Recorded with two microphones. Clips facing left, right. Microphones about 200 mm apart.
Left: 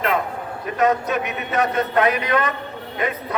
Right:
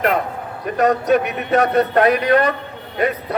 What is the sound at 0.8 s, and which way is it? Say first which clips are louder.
A man's voice: right 4 dB; 35° right (ahead or behind).